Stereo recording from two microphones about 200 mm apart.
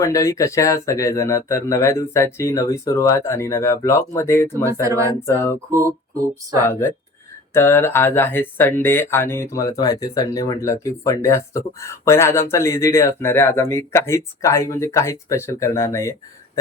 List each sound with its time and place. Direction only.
0.0 s speech: 15° left (ahead or behind)
4.6 s speech: 15° right (ahead or behind)
6.7 s speech: 10° left (ahead or behind)